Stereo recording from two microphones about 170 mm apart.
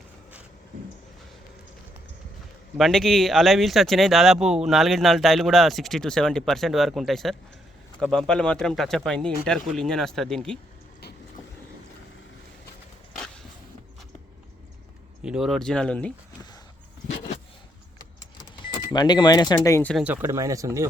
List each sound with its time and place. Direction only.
2.7 s speech: centre (ahead or behind)
15.2 s speech: 5° right (ahead or behind)
18.6 s speech: 25° left (ahead or behind)
19.9 s speech: centre (ahead or behind)
20.2 s speech: 15° right (ahead or behind)